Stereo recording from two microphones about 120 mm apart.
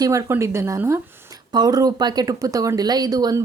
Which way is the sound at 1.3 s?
35° right (ahead or behind).